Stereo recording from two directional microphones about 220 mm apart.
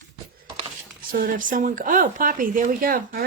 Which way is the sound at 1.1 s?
40° right (ahead or behind).